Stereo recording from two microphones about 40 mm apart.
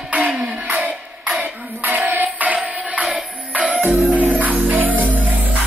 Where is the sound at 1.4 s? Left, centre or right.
Right.